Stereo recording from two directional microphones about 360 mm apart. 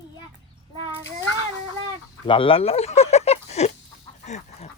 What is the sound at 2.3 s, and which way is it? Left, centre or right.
Speech, centre.